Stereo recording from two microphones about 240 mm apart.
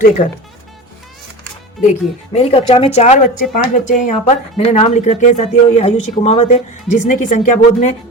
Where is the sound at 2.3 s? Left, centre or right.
Left.